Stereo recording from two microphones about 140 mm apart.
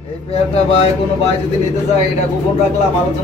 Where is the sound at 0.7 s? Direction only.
45° left (ahead or behind).